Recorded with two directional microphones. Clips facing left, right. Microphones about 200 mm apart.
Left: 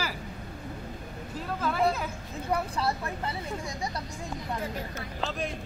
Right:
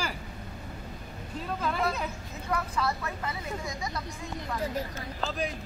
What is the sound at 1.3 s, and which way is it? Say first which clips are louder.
Speech: left 1 dB; 5° left (ahead or behind).